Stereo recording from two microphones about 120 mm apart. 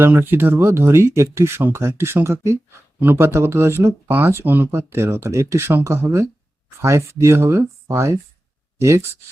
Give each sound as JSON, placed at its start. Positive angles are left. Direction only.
{"t": 0.0, "sound": "speech", "side_deg": -20}